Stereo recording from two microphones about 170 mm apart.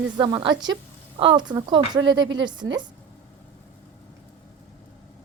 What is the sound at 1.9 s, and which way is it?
Speech, 90° right.